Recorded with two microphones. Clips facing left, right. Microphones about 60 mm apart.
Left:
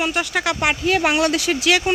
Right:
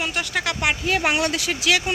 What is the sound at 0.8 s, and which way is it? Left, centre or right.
Speech, left.